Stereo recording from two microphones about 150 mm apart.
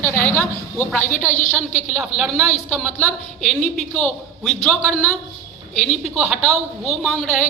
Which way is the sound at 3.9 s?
5° left (ahead or behind).